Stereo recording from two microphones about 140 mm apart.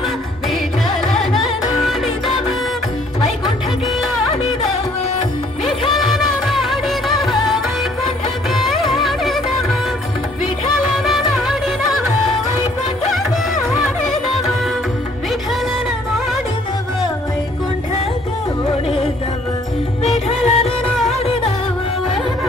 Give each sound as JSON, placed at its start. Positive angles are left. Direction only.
{"t": 1.1, "sound": "music", "side_deg": 0}
{"t": 5.9, "sound": "music", "side_deg": 0}
{"t": 11.1, "sound": "music", "side_deg": 0}
{"t": 20.2, "sound": "music", "side_deg": 50}
{"t": 20.9, "sound": "music", "side_deg": 0}